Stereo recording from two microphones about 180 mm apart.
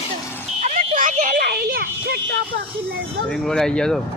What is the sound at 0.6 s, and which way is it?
A woman's voice, 45° right (ahead or behind).